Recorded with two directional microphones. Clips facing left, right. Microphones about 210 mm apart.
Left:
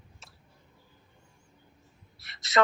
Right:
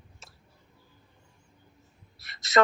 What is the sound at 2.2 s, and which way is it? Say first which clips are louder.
Speech: right 2 dB; 45° right (ahead or behind).